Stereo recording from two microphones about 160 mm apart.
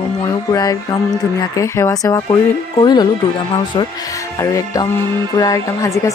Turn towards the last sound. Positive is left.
turn(degrees=20)  # may be behind; listen again after turning